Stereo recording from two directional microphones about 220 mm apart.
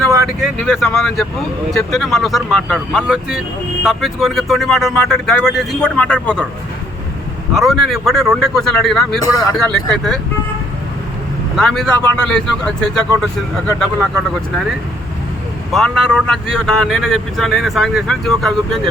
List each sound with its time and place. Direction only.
0.3 s speech: centre (ahead or behind)
7.5 s speech: centre (ahead or behind)
9.2 s speech: 15° left (ahead or behind)
9.6 s speech: centre (ahead or behind)
11.5 s speech: centre (ahead or behind)
15.7 s speech: centre (ahead or behind)